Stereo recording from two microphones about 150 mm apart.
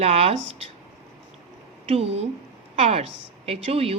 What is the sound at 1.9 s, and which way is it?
A woman's voice, 40° right (ahead or behind).